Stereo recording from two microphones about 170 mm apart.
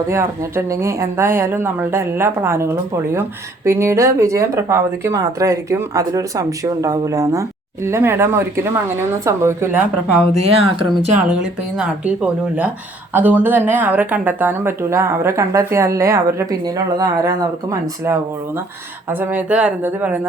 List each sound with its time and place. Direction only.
0.1 s speech: 15° right (ahead or behind)
10.3 s speech: 30° right (ahead or behind)
11.8 s speech: 5° right (ahead or behind)
19.2 s speech: 10° right (ahead or behind)